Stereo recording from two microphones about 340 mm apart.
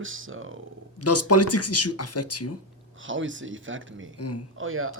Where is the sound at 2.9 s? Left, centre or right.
Right.